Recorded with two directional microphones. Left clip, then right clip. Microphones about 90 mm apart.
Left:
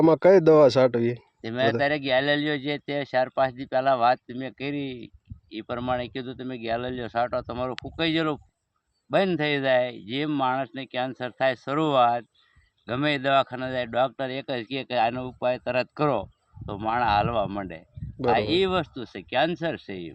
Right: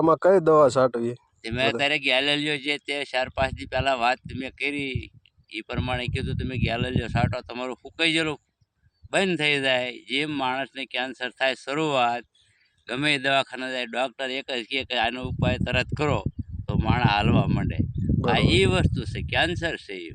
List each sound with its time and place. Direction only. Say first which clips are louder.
0.0 s speech: left 2 dB; 15° left (ahead or behind)
1.5 s speech: even; 10° left (ahead or behind)